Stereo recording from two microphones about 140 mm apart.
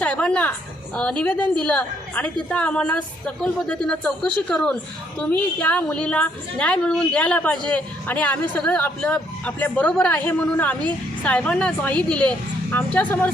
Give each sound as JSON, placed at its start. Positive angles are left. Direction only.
{"t": 0.0, "sound": "a woman's voice", "side_deg": 5}